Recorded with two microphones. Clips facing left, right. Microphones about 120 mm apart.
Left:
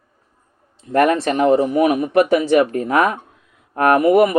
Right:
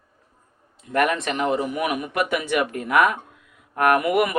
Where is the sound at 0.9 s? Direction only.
35° left (ahead or behind).